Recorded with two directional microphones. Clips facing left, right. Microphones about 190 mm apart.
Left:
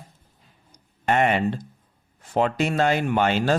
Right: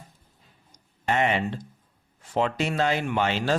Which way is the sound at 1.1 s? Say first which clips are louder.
Left 4 dB; 50° left (ahead or behind).